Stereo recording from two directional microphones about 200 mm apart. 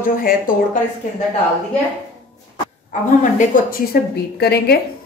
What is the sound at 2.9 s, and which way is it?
A woman's voice, 40° left (ahead or behind).